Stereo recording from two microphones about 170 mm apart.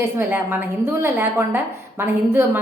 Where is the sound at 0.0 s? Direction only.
15° right (ahead or behind).